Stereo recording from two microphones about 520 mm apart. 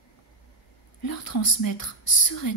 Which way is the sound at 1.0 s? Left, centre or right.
Left.